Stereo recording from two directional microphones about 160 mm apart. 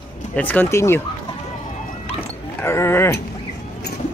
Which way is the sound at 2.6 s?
15° left (ahead or behind).